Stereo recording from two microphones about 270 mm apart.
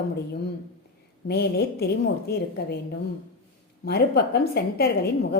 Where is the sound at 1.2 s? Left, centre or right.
Left.